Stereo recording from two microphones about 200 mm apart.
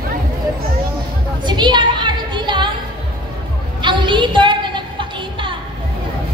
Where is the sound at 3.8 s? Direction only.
25° right (ahead or behind).